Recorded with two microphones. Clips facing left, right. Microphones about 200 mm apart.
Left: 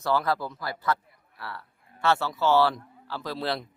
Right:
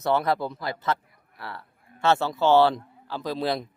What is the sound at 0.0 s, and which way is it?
A man's voice, 20° right (ahead or behind).